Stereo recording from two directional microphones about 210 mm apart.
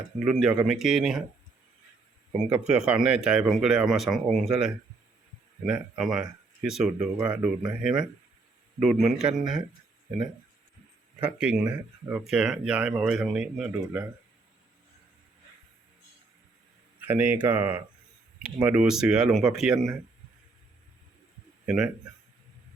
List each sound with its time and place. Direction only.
0.3 s speech: 5° right (ahead or behind)
2.5 s speech: 5° right (ahead or behind)
11.2 s speech: 5° right (ahead or behind)
17.0 s speech: 10° right (ahead or behind)